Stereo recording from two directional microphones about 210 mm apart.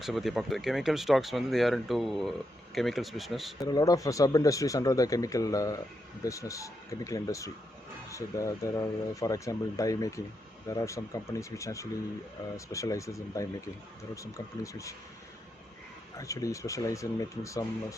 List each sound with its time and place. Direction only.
0.0 s speech: centre (ahead or behind)
3.6 s speech: 15° left (ahead or behind)
16.1 s speech: 15° left (ahead or behind)